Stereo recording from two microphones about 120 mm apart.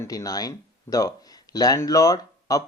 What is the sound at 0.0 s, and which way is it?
Speech, 30° left (ahead or behind).